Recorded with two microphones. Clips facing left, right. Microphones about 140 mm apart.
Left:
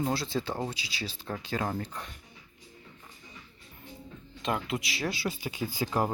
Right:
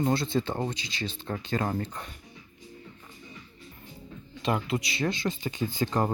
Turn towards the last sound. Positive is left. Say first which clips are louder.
# right 2 dB
turn(degrees=5)  # may be behind; listen again after turning